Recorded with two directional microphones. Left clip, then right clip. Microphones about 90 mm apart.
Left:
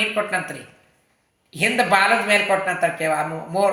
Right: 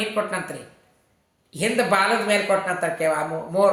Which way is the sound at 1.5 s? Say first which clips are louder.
Left 3 dB; 25° right (ahead or behind).